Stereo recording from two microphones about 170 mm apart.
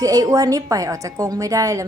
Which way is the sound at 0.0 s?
20° right (ahead or behind).